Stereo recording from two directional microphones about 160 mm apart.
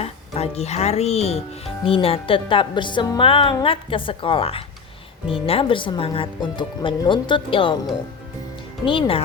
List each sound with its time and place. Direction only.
0.0 s speech: 40° left (ahead or behind)
8.8 s speech: 30° left (ahead or behind)